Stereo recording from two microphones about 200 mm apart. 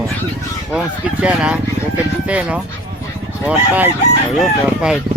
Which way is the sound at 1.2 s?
5° right (ahead or behind).